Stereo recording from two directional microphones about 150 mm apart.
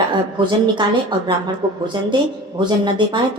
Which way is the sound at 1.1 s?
30° right (ahead or behind).